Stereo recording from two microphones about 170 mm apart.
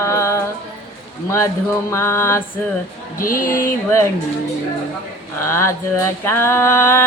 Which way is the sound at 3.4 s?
55° left (ahead or behind).